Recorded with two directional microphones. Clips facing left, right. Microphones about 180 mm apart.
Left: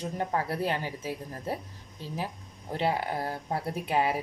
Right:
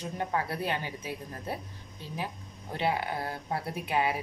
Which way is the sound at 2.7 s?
35° left (ahead or behind).